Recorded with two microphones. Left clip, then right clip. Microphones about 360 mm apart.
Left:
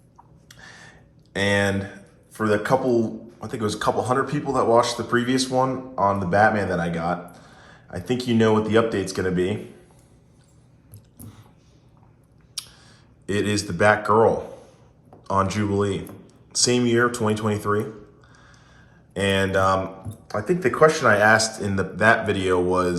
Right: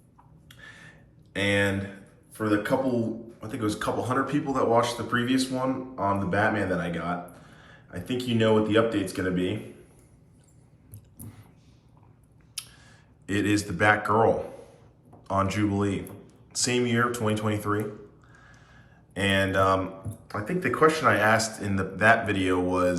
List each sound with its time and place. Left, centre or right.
0.4 s a sound: centre
1.3 s a man's voice: centre
12.5 s speech: centre
19.1 s speech: centre